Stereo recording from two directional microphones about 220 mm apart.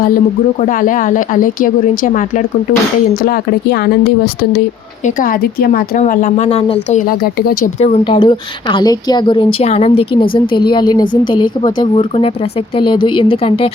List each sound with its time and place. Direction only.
0.6 s speech: 35° left (ahead or behind)
5.0 s speech: 40° left (ahead or behind)
8.0 s a woman's voice: 20° left (ahead or behind)